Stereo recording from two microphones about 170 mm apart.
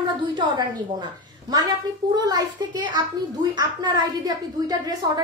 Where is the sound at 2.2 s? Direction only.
25° right (ahead or behind).